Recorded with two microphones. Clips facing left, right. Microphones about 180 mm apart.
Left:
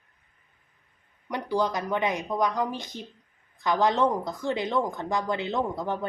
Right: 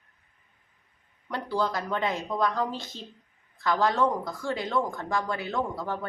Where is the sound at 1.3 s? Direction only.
15° left (ahead or behind).